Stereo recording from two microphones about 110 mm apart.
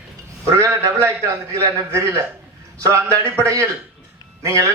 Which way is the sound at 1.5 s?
30° right (ahead or behind).